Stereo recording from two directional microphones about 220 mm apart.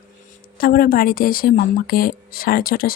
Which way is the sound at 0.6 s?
40° left (ahead or behind).